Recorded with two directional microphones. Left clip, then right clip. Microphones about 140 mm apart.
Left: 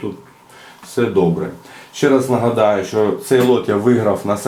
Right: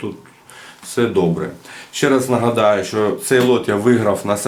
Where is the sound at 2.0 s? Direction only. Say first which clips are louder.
Left 1 dB; 15° right (ahead or behind).